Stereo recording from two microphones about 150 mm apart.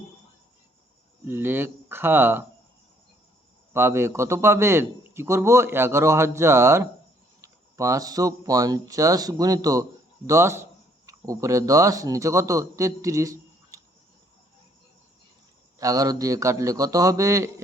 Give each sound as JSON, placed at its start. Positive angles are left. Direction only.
{"t": 1.2, "sound": "speech", "side_deg": -15}
{"t": 3.7, "sound": "a man's voice", "side_deg": -15}
{"t": 15.8, "sound": "speech", "side_deg": -25}